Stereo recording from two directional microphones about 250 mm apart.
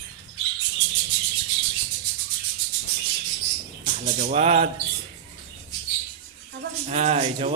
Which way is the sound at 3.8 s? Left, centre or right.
Right.